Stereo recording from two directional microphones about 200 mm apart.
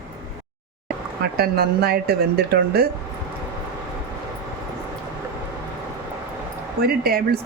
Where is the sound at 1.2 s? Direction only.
50° right (ahead or behind).